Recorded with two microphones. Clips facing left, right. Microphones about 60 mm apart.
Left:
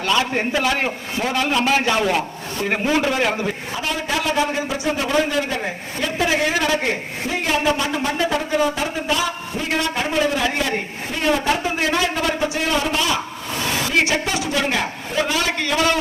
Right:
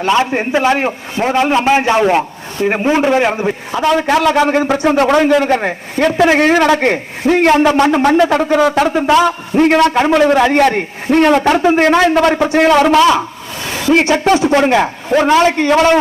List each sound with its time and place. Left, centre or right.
0.0 s a man's voice: right
3.8 s a man's voice: right
13.9 s a man's voice: right